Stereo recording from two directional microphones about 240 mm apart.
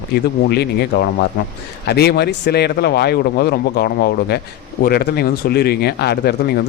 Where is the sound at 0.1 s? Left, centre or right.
Left.